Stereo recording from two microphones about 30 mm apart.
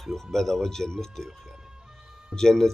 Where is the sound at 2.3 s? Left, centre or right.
Centre.